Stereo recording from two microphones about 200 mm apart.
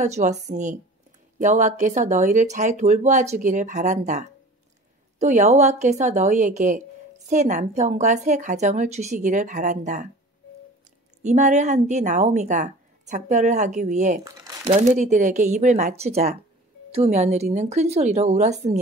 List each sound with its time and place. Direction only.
0.0 s a woman's voice: 35° right (ahead or behind)
11.2 s a woman's voice: 35° right (ahead or behind)
14.2 s crumpling: 20° right (ahead or behind)
14.8 s a woman's voice: 35° right (ahead or behind)